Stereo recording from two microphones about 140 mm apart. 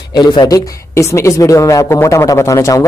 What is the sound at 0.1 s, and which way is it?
Speech, 30° left (ahead or behind).